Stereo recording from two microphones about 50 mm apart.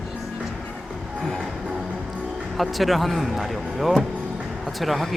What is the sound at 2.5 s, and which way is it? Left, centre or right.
Speech, centre.